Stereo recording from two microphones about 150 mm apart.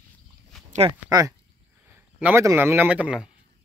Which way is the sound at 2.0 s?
10° right (ahead or behind).